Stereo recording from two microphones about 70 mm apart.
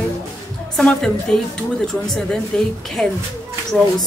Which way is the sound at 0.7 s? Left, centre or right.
Centre.